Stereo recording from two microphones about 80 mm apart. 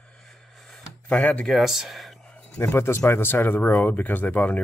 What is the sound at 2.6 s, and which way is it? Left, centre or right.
Speech, left.